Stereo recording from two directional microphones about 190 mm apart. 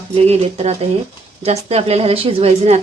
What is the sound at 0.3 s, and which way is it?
A woman's voice, 35° right (ahead or behind).